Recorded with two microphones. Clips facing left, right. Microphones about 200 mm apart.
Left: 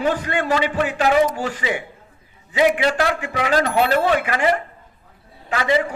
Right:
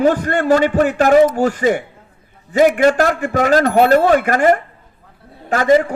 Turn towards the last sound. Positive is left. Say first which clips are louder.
# right 7 dB
turn(degrees=-45)  # may be behind; listen again after turning